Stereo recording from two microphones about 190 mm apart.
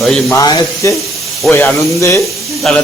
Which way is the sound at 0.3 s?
20° left (ahead or behind).